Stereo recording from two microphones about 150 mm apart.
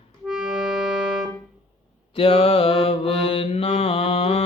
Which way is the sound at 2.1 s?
40° left (ahead or behind).